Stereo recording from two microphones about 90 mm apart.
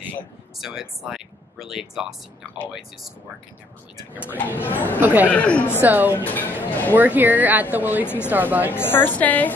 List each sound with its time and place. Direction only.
0.6 s speech: 5° right (ahead or behind)
4.1 s speech: 20° right (ahead or behind)
4.6 s speech: 20° left (ahead or behind)
5.0 s speech: 20° right (ahead or behind)
5.3 s speech: 15° left (ahead or behind)
5.8 s speech: 20° right (ahead or behind)
6.1 s speech: 20° left (ahead or behind)
7.0 s speech: 20° right (ahead or behind)
8.7 s speech: 25° left (ahead or behind)